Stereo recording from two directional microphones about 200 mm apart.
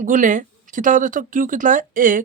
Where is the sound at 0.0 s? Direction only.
40° right (ahead or behind).